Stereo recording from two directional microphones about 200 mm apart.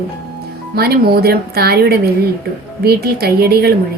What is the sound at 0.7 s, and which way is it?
Speech, 50° right (ahead or behind).